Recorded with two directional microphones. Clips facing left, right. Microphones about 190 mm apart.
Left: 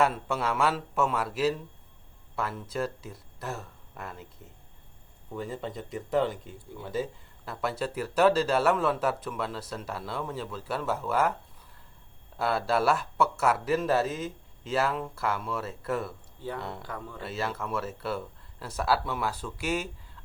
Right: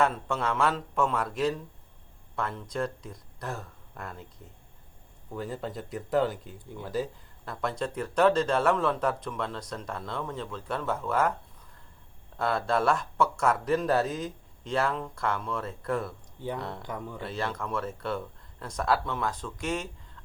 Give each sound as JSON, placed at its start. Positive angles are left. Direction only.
{"t": 0.0, "sound": "speech", "side_deg": 10}
{"t": 5.3, "sound": "speech", "side_deg": 0}
{"t": 12.4, "sound": "speech", "side_deg": 5}
{"t": 16.8, "sound": "speech", "side_deg": -20}
{"t": 17.2, "sound": "speech", "side_deg": 5}